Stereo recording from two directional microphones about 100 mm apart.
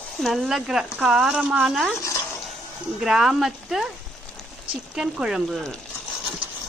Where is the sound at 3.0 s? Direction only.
5° right (ahead or behind).